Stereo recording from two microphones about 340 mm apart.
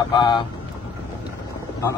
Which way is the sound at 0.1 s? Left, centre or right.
Centre.